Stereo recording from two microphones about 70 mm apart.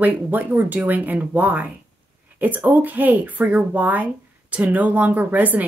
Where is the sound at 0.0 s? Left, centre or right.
Right.